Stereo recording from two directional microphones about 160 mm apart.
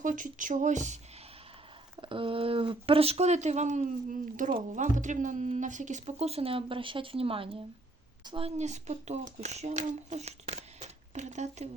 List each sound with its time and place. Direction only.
0.0 s speech: 55° right (ahead or behind)
2.0 s speech: 35° right (ahead or behind)